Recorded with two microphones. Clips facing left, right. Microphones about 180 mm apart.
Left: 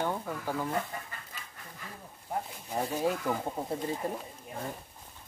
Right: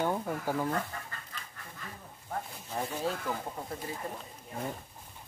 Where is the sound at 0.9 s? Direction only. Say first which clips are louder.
Left 2 dB; 15° left (ahead or behind).